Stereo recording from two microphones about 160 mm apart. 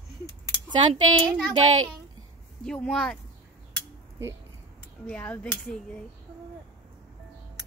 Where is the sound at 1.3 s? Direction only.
5° left (ahead or behind).